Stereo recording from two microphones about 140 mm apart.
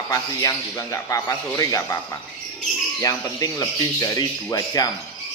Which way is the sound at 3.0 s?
25° left (ahead or behind).